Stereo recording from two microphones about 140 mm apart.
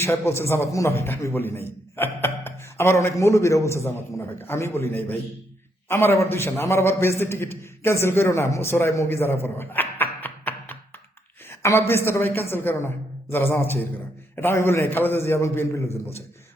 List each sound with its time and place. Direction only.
0.0 s a man's voice: 20° left (ahead or behind)